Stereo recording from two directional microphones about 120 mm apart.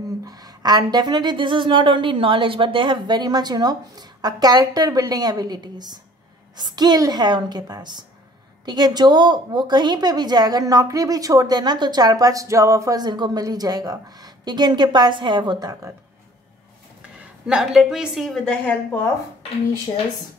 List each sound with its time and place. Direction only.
0.2 s a woman's voice: 30° right (ahead or behind)
17.2 s a woman's voice: 5° right (ahead or behind); by 19.0 s 15° left (ahead or behind)